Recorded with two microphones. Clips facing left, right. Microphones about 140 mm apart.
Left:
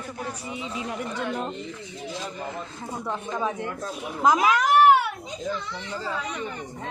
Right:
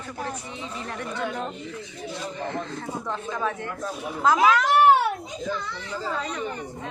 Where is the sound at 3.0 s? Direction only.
15° left (ahead or behind).